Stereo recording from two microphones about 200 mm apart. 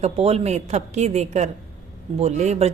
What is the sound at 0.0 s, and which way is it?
Speech, 30° right (ahead or behind).